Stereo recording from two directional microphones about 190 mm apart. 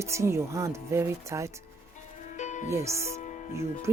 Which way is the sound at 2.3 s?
40° left (ahead or behind).